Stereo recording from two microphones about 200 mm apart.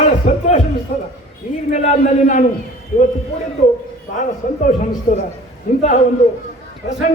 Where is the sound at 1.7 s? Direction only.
35° left (ahead or behind).